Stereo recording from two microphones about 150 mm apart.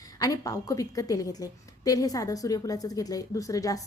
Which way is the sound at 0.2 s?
25° left (ahead or behind).